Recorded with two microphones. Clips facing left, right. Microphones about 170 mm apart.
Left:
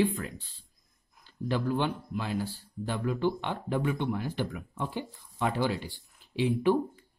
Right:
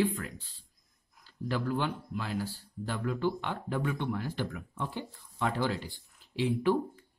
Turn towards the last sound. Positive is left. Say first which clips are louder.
# left 2 dB
turn(degrees=15)  # may be behind; listen again after turning